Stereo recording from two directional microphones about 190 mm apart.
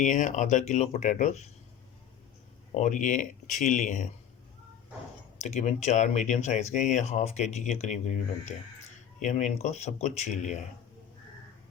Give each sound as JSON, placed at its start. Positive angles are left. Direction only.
{"t": 0.0, "sound": "speech", "side_deg": 40}
{"t": 2.7, "sound": "speech", "side_deg": 40}
{"t": 5.4, "sound": "speech", "side_deg": 35}